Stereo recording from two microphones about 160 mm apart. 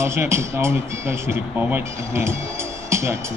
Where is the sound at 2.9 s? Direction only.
15° right (ahead or behind).